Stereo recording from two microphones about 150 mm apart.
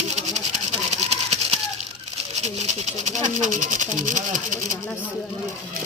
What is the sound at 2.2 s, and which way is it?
Speech, 50° right (ahead or behind).